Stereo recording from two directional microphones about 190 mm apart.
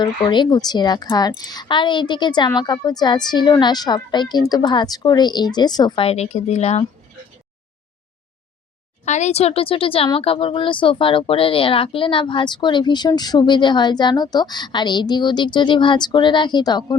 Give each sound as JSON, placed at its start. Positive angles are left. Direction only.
{"t": 0.0, "sound": "speech", "side_deg": 25}
{"t": 9.0, "sound": "speech", "side_deg": 35}